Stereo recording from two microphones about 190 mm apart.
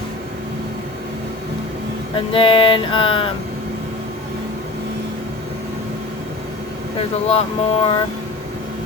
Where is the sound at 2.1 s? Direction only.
30° left (ahead or behind).